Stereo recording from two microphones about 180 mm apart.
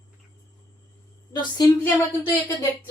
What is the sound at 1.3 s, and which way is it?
Speech, 25° left (ahead or behind).